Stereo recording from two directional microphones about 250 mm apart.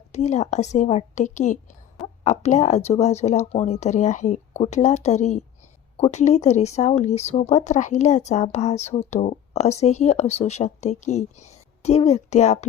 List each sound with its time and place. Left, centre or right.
0.1 s speech: left